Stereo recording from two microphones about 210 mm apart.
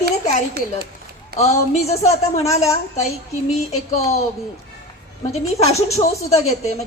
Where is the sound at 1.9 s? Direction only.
30° left (ahead or behind).